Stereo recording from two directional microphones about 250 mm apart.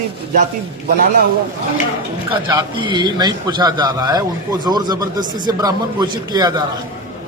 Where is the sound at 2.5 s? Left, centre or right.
Centre.